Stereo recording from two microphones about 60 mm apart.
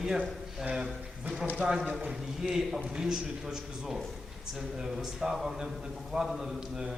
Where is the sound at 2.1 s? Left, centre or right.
Centre.